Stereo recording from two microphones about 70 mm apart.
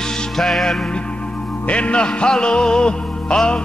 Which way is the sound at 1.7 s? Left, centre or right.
Centre.